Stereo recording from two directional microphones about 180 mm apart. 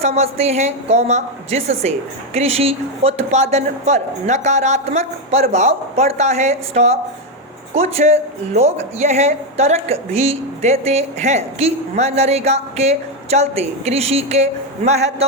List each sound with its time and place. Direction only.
0.0 s speech: 35° right (ahead or behind)